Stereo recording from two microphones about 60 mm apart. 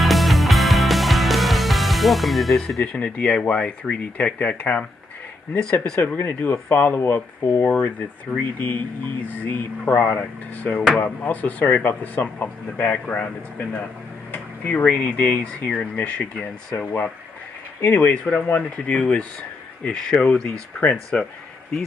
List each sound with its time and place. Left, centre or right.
0.0 s music: centre
2.8 s speech: left
5.6 s speech: centre
6.2 s speech: left
14.3 s a sound: left
14.8 s speech: left